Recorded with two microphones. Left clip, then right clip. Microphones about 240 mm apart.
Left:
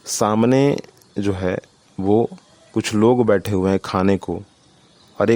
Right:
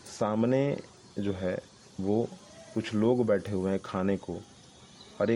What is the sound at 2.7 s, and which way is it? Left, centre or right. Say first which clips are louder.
Speech: left 11 dB; left.